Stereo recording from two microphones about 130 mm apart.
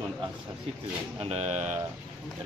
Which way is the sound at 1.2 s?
55° right (ahead or behind).